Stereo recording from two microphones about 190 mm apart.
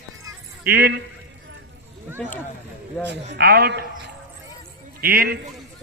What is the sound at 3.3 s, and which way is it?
Speech, 55° right (ahead or behind).